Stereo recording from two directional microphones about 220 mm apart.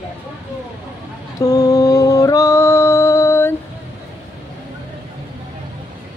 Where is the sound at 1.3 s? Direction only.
15° left (ahead or behind).